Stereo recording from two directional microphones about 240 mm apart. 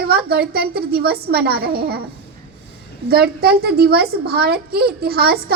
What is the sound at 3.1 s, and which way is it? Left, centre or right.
A child's voice, right.